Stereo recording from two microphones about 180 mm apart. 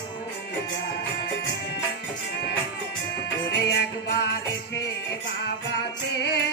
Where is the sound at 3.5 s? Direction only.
65° left (ahead or behind).